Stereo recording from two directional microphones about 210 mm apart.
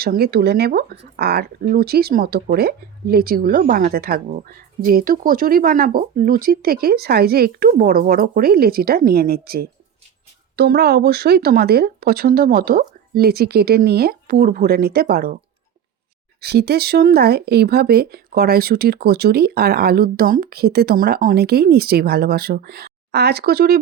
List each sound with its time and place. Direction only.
0.0 s speech: 50° right (ahead or behind)
16.4 s speech: 50° right (ahead or behind)